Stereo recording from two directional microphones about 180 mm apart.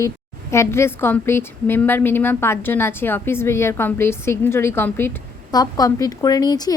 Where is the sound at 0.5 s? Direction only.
15° left (ahead or behind).